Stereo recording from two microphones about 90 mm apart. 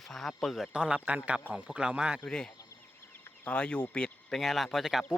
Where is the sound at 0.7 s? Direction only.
10° right (ahead or behind).